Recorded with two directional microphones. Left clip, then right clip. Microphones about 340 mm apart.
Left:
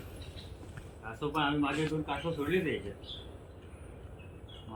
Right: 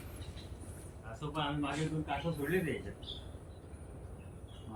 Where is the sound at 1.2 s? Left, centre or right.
Centre.